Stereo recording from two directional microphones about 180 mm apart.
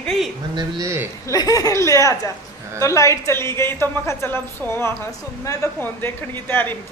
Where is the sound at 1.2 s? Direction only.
20° left (ahead or behind).